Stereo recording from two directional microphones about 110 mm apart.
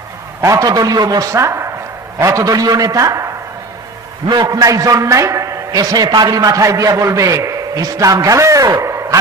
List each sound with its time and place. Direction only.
0.4 s a man's voice: 30° right (ahead or behind)
4.3 s a man's voice: 35° right (ahead or behind)
8.8 s a sound: 25° right (ahead or behind)